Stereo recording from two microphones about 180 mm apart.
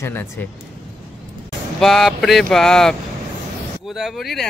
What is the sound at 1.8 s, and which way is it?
Speech, centre (ahead or behind).